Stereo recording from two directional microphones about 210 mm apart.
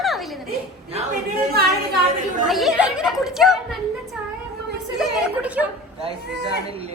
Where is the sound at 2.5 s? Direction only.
Centre (ahead or behind).